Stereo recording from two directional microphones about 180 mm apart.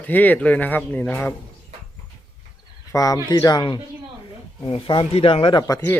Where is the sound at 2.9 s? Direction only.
20° left (ahead or behind).